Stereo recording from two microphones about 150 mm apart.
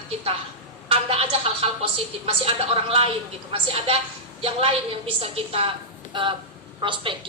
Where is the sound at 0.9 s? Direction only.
40° right (ahead or behind).